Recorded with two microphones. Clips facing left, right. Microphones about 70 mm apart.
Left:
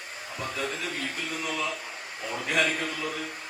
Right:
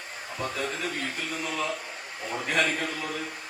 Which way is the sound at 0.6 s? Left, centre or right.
Right.